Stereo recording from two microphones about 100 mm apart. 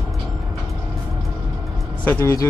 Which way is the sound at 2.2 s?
30° left (ahead or behind).